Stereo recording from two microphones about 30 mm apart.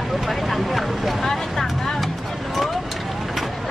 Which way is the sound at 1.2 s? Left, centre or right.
Centre.